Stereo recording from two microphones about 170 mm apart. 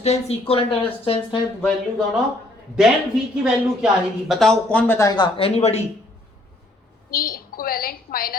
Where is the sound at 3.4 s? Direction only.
Centre (ahead or behind); by 5.8 s 40° left (ahead or behind).